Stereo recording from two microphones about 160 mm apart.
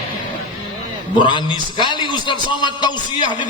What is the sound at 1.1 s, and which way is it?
A man's voice, 30° left (ahead or behind).